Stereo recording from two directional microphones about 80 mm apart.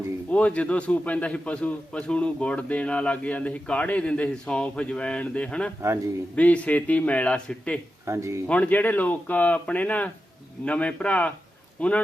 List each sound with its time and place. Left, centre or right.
0.3 s a man's voice: centre
8.0 s speech: right
8.4 s a man's voice: centre